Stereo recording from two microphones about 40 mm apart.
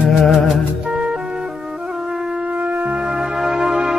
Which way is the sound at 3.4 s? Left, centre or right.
Centre.